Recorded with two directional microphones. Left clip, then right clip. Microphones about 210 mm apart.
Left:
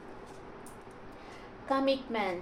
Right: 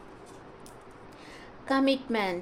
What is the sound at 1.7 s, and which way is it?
Speech, 55° right (ahead or behind).